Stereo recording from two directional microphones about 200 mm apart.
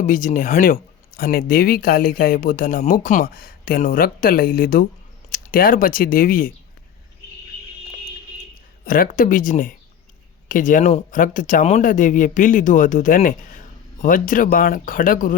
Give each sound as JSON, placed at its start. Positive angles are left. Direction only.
{"t": 0.0, "sound": "speech", "side_deg": 40}
{"t": 8.8, "sound": "speech", "side_deg": 45}